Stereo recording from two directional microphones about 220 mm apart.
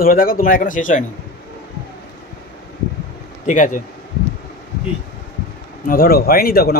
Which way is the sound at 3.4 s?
35° left (ahead or behind).